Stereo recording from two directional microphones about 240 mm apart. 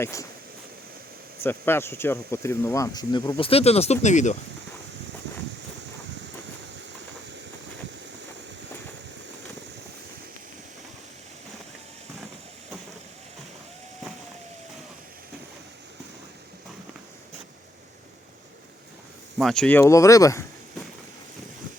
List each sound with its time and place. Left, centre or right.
0.0 s speech: centre
1.5 s speech: centre; by 4.4 s left
19.4 s speech: centre